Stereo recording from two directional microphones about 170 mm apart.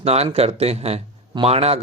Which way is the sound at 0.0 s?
35° right (ahead or behind).